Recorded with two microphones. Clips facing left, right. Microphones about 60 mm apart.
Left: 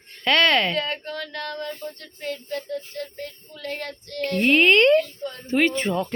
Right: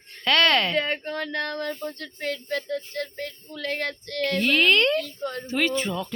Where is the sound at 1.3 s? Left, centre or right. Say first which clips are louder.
Right 2 dB; right.